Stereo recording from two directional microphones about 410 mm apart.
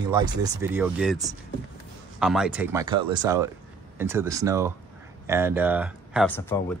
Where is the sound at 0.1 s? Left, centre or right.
Centre.